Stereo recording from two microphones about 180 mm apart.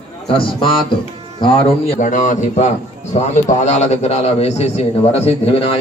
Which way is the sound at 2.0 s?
45° left (ahead or behind).